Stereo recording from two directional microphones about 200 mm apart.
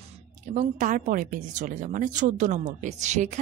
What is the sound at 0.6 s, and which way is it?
A woman's voice, 40° right (ahead or behind).